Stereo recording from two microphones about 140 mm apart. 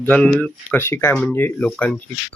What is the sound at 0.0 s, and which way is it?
Speech, 10° left (ahead or behind).